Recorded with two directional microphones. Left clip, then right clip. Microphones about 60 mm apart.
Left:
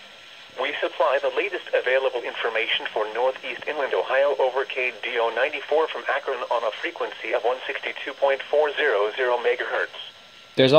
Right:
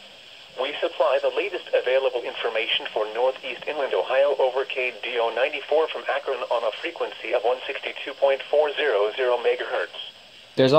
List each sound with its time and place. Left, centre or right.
0.6 s speech: left
10.6 s speech: centre